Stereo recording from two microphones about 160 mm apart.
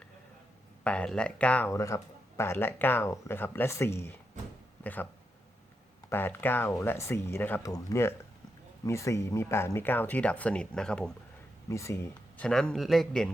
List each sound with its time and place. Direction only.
0.9 s speech: 5° left (ahead or behind)
6.1 s speech: 15° left (ahead or behind)
11.7 s speech: 20° left (ahead or behind)
12.5 s a man's voice: 5° left (ahead or behind)